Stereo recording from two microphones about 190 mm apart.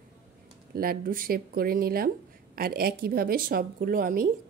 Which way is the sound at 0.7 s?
50° right (ahead or behind).